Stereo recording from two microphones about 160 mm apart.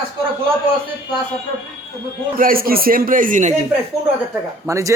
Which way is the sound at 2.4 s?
65° right (ahead or behind).